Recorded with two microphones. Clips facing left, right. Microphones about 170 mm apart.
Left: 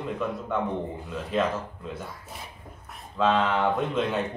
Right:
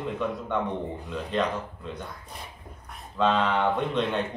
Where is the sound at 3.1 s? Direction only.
Centre (ahead or behind).